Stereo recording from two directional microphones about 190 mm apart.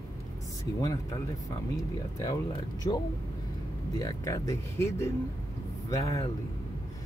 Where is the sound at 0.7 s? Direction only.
15° left (ahead or behind).